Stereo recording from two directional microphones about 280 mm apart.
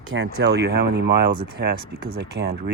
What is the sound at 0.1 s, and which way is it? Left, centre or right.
Speech, right.